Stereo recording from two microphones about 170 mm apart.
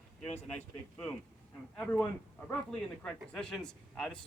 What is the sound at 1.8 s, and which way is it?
A man's voice, 5° left (ahead or behind).